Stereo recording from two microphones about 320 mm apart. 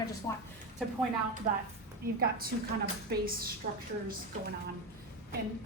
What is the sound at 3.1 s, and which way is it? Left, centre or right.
Speech, right.